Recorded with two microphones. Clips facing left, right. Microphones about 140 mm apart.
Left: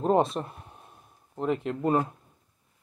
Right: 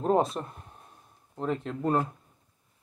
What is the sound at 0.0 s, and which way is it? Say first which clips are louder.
Speech: left 2 dB; centre (ahead or behind).